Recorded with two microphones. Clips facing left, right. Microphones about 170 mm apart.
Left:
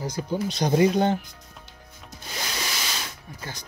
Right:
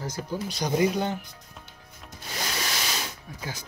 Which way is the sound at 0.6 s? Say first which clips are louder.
Left 4 dB; 40° left (ahead or behind).